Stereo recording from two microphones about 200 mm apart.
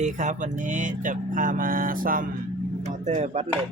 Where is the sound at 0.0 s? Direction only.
40° right (ahead or behind).